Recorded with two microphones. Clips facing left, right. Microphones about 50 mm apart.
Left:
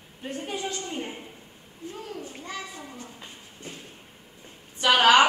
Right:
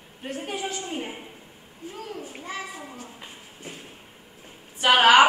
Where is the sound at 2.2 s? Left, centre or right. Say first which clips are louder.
Right 2 dB; centre.